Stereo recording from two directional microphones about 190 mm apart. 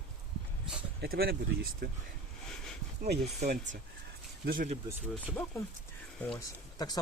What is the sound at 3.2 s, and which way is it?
Speech, 40° right (ahead or behind).